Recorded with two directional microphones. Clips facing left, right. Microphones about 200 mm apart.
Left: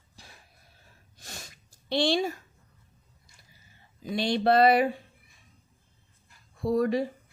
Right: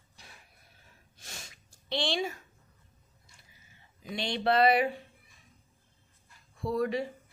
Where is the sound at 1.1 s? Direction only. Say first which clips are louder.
Left 4 dB; 35° left (ahead or behind).